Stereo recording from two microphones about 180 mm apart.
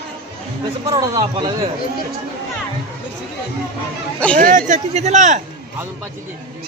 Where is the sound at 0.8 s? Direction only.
20° right (ahead or behind).